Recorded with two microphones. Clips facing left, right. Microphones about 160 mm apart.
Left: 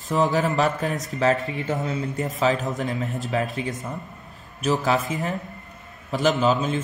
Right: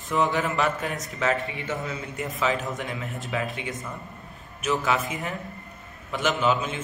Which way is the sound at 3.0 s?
Centre (ahead or behind).